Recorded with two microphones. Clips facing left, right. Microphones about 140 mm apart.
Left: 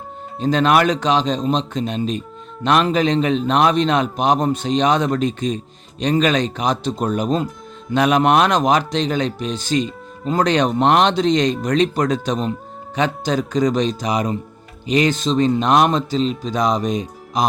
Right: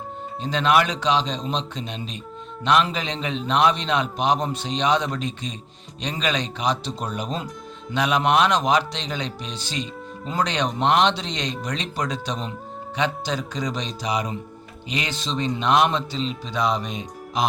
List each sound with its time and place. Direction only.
0.4 s a man's voice: 45° left (ahead or behind)